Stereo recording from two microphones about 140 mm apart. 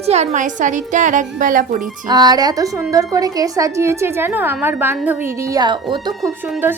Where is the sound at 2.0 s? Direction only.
30° right (ahead or behind).